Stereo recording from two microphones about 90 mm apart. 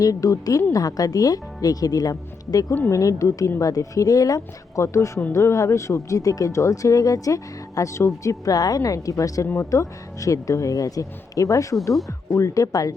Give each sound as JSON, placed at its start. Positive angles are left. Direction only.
{"t": 0.0, "sound": "speech", "side_deg": 40}